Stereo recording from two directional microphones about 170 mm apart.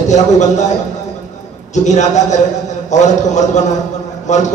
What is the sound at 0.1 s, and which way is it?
Speech, 45° left (ahead or behind).